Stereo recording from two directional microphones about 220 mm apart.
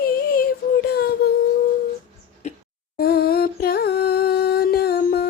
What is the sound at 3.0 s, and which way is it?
Humming, 45° left (ahead or behind).